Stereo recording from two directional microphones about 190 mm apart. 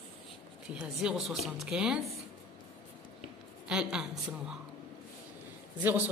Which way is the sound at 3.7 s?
5° right (ahead or behind).